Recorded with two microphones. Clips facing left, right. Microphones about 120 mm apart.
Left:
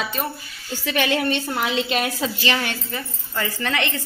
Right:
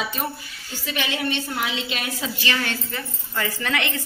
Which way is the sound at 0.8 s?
55° left (ahead or behind).